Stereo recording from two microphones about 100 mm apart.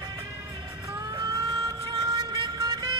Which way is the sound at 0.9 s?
35° right (ahead or behind).